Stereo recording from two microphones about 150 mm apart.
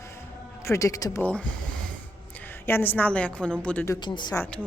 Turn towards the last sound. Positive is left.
turn(degrees=15)  # may be behind; listen again after turning